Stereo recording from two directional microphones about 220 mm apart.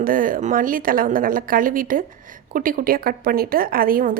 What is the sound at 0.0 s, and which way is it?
A woman's voice, 40° right (ahead or behind).